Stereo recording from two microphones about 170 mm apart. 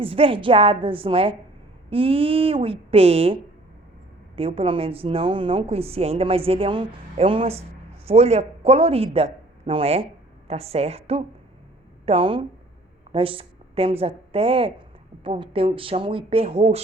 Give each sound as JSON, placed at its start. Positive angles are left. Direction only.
{"t": 0.0, "sound": "a woman's voice", "side_deg": -30}
{"t": 4.4, "sound": "a woman's voice", "side_deg": -35}